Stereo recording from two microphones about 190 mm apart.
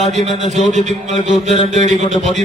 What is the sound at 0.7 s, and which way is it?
A man's voice, 35° right (ahead or behind).